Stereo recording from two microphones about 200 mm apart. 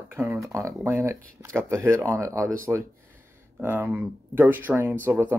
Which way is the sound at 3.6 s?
10° right (ahead or behind).